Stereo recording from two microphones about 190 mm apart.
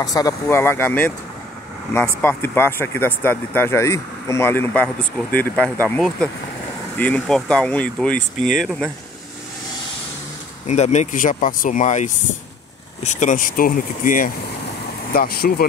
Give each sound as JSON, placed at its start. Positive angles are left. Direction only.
{"t": 0.0, "sound": "speech", "side_deg": 20}
{"t": 2.2, "sound": "speech", "side_deg": 10}
{"t": 10.7, "sound": "speech", "side_deg": 35}